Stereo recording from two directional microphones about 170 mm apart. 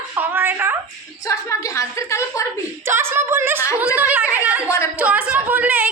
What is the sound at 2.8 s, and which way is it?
Speech, 15° right (ahead or behind).